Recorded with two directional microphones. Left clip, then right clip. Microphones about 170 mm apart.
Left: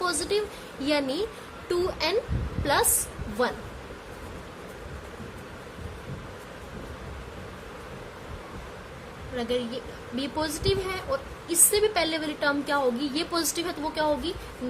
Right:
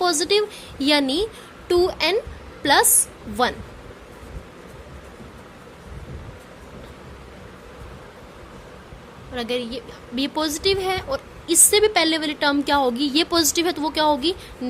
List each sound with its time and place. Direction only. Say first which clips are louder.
0.0 s a woman's voice: right 8 dB; 50° right (ahead or behind)
3.4 s a woman's voice: right 6 dB; 50° right (ahead or behind)
9.3 s a woman's voice: right 3 dB; 50° right (ahead or behind)